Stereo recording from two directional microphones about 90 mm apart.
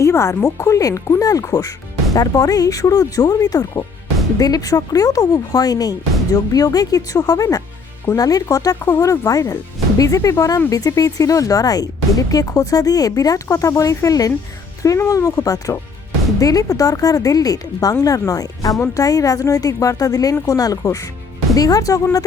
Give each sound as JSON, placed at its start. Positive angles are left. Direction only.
{"t": 0.0, "sound": "speech", "side_deg": 35}
{"t": 8.8, "sound": "speech", "side_deg": 30}